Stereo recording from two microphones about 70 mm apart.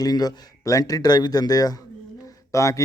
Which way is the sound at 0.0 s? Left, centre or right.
Left.